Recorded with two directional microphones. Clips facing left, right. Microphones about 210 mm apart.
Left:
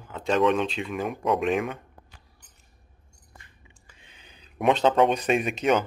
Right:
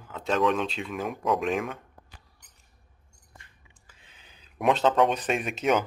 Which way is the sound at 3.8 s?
5° right (ahead or behind).